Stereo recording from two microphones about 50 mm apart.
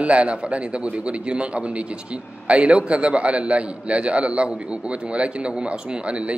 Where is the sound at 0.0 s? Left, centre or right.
Right.